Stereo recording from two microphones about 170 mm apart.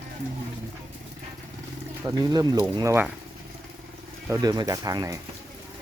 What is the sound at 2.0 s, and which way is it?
Speech, 20° right (ahead or behind).